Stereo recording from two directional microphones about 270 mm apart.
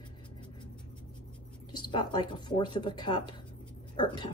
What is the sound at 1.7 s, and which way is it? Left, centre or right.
Speech, centre.